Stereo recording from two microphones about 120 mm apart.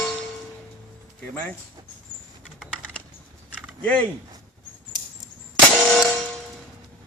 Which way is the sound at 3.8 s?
15° left (ahead or behind).